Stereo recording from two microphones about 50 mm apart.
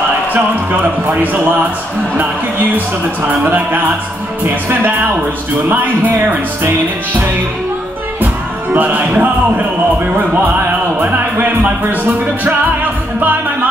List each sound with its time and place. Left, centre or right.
0.3 s music: right
4.8 s music: right
8.7 s music: right